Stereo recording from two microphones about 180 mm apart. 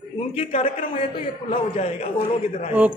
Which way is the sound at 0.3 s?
35° left (ahead or behind).